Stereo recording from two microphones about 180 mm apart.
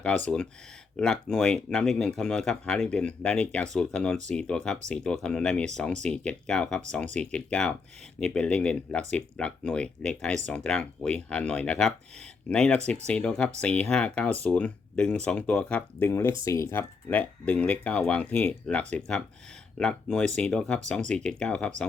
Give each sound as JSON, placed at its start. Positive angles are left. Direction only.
{"t": 0.9, "sound": "speech", "side_deg": 5}